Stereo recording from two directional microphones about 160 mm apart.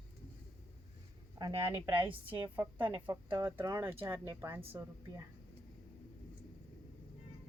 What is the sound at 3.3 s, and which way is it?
Speech, 15° right (ahead or behind).